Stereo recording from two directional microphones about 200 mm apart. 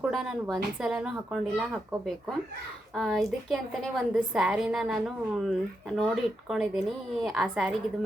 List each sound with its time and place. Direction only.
0.0 s a woman's voice: 5° right (ahead or behind)